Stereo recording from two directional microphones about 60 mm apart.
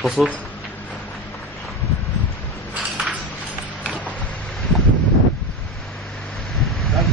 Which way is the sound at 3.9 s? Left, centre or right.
Left.